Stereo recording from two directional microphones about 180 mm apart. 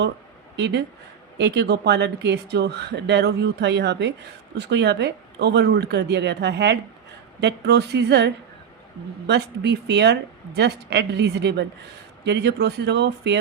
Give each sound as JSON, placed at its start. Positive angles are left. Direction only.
{"t": 0.5, "sound": "speech", "side_deg": -70}